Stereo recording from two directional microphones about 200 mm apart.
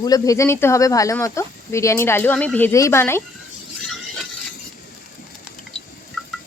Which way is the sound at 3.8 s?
Centre (ahead or behind).